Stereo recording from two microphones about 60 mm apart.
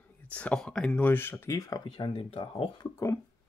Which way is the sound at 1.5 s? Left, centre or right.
Left.